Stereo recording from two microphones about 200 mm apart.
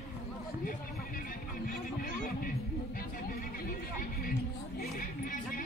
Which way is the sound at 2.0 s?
45° left (ahead or behind).